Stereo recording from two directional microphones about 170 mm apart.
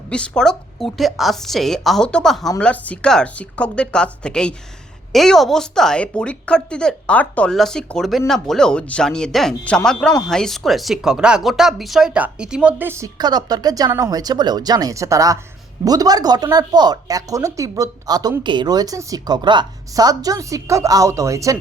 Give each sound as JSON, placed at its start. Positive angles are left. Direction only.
{"t": 0.1, "sound": "a woman's voice", "side_deg": 5}